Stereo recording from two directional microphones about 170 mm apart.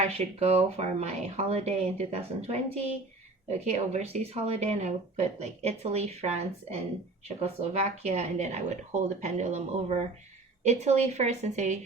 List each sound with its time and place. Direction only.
0.0 s a woman's voice: 40° right (ahead or behind)